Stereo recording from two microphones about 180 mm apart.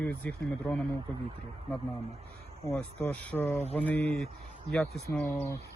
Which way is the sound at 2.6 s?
10° left (ahead or behind).